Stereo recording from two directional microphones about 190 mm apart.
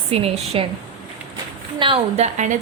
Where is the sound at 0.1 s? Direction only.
30° right (ahead or behind).